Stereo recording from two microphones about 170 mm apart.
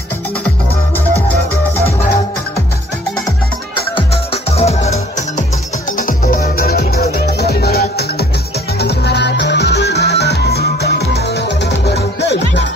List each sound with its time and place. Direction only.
3.9 s music: 35° left (ahead or behind)
5.9 s music: 55° left (ahead or behind); by 12.6 s 90° left